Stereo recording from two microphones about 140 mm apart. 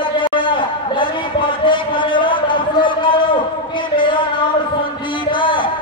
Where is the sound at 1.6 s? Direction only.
35° left (ahead or behind).